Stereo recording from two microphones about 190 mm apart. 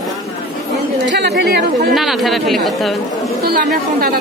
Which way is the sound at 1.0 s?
65° right (ahead or behind).